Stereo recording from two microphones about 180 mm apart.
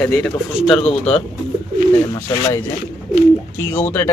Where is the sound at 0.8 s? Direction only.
35° left (ahead or behind).